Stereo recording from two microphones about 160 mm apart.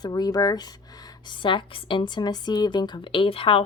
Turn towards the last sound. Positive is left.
turn(degrees=35)  # may be behind; listen again after turning